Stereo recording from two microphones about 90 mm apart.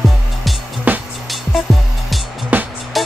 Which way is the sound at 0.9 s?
15° right (ahead or behind).